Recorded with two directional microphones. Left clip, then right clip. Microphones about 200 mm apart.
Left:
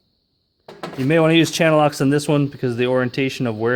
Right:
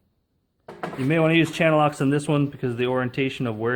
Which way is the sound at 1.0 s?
45° left (ahead or behind).